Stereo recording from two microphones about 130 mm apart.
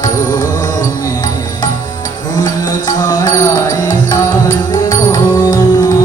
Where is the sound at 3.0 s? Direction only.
30° left (ahead or behind).